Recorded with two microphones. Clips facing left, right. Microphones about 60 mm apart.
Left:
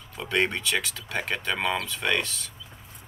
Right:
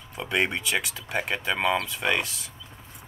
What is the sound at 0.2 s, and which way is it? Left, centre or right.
Speech, centre.